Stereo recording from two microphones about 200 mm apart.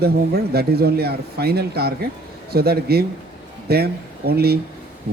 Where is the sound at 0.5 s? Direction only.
50° right (ahead or behind).